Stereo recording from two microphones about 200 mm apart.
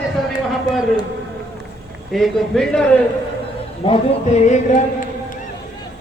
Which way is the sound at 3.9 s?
35° left (ahead or behind).